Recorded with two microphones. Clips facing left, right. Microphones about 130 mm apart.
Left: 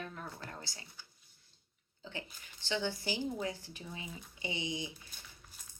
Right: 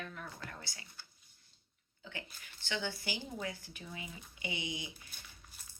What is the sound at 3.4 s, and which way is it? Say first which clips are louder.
Speech: left 3 dB; 35° left (ahead or behind).